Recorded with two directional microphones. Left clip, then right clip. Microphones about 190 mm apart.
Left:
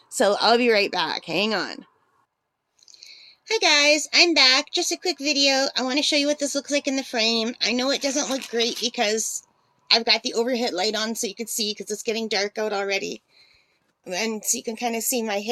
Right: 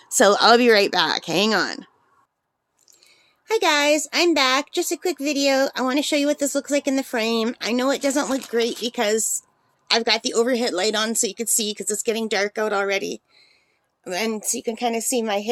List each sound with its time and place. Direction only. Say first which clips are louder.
0.0 s speech: right 4 dB; 20° right (ahead or behind)
3.0 s a woman's voice: left 11 dB; 10° right (ahead or behind)